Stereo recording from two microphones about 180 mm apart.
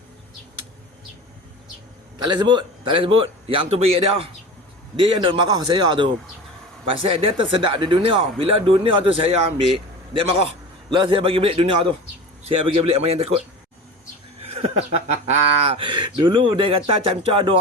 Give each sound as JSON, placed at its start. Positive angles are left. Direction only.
{"t": 2.2, "sound": "speech", "side_deg": -25}
{"t": 10.8, "sound": "speech", "side_deg": -25}
{"t": 14.4, "sound": "speech", "side_deg": -35}